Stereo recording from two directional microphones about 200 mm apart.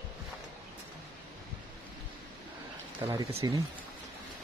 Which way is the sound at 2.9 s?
20° right (ahead or behind).